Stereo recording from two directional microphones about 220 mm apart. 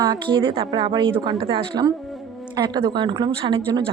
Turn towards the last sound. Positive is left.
turn(degrees=-20)  # may be behind; listen again after turning